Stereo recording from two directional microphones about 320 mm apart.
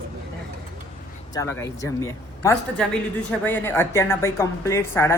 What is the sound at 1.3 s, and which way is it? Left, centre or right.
Speech, centre.